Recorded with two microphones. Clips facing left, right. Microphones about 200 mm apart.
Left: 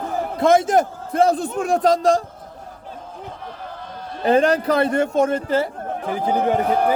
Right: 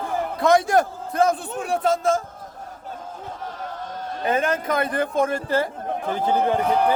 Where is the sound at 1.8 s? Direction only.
40° left (ahead or behind).